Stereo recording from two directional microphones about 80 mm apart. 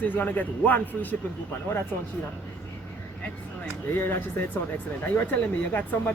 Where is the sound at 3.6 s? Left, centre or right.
Left.